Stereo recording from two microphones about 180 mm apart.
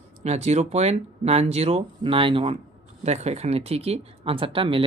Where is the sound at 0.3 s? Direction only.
40° right (ahead or behind).